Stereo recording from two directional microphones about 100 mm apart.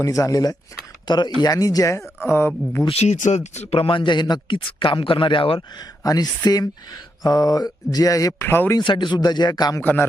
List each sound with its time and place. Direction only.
0.0 s speech: 35° left (ahead or behind)
2.9 s speech: 90° left; by 5.6 s 60° left (ahead or behind)
6.0 s speech: 40° left (ahead or behind); by 8.8 s 25° left (ahead or behind)
8.8 s speech: 50° left (ahead or behind)
9.8 s a man's voice: 20° left (ahead or behind)